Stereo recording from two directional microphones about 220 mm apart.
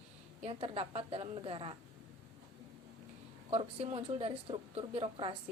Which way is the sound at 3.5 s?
25° right (ahead or behind).